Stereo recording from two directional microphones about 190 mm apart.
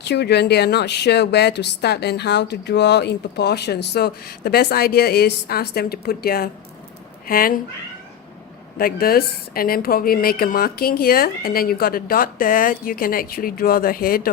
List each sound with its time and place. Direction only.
0.0 s a woman's voice: 60° left (ahead or behind)
8.8 s speech: 50° left (ahead or behind)